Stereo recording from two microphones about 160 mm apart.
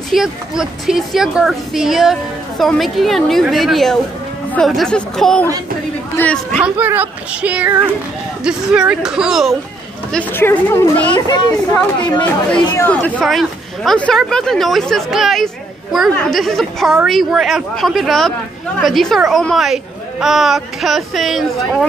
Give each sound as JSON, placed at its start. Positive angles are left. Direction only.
{"t": 0.1, "sound": "speech", "side_deg": -5}
{"t": 6.6, "sound": "speech", "side_deg": -10}
{"t": 10.1, "sound": "speech", "side_deg": 10}
{"t": 12.0, "sound": "speech", "side_deg": 30}
{"t": 12.7, "sound": "speech", "side_deg": 10}
{"t": 13.2, "sound": "speech", "side_deg": 0}